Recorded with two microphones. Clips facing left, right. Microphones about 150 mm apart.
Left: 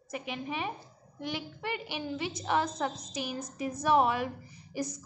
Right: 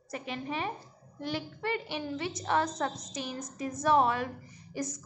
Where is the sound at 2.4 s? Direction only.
5° left (ahead or behind).